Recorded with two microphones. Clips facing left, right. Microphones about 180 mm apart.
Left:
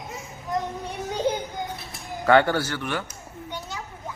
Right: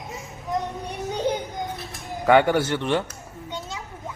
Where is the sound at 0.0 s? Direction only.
Centre (ahead or behind).